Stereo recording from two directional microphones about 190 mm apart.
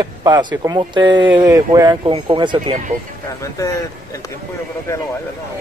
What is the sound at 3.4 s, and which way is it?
Speech, 15° left (ahead or behind).